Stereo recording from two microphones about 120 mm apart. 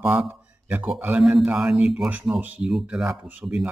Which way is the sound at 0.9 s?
15° right (ahead or behind).